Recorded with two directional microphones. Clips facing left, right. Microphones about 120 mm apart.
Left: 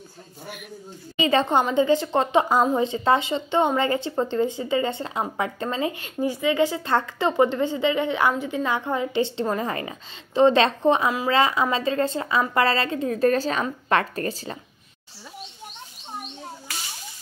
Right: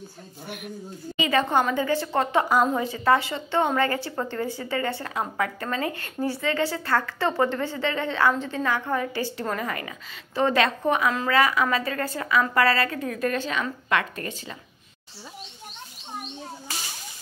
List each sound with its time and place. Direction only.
1.2 s speech: 25° left (ahead or behind)